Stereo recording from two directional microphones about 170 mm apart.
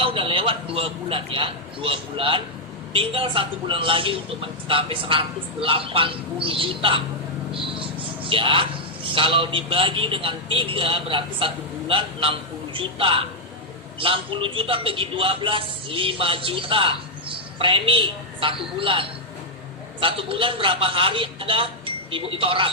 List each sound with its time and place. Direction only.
0.0 s a man's voice: 30° right (ahead or behind)